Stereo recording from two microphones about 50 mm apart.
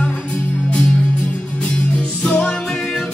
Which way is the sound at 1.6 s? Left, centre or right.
Left.